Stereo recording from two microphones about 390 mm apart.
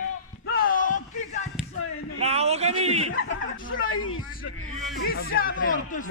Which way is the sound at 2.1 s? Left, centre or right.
Centre.